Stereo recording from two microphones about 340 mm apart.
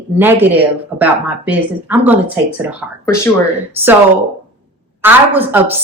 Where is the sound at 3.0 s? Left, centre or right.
Centre.